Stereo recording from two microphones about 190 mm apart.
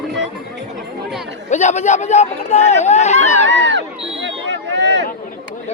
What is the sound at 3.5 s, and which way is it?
Speech, 70° right (ahead or behind).